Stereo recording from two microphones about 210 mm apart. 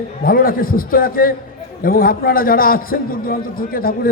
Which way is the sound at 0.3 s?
45° left (ahead or behind).